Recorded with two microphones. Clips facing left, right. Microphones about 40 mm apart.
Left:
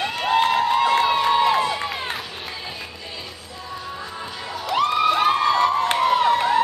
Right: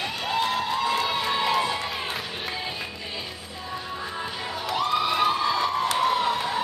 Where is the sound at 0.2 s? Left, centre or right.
Left.